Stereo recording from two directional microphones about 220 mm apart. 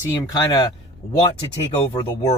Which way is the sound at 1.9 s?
30° left (ahead or behind).